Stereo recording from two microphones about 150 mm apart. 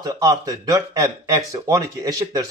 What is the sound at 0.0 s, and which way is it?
Speech, 20° right (ahead or behind).